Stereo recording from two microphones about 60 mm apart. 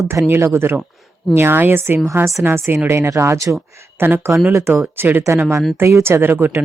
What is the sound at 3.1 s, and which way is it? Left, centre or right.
Speech, right.